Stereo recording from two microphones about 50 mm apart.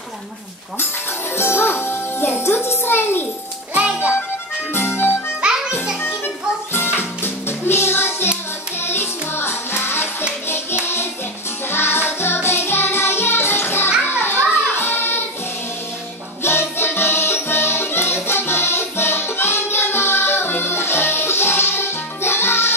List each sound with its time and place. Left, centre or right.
1.3 s music: left
3.7 s music: right
4.7 s music: left
6.7 s music: left
11.7 s music: left
16.4 s music: left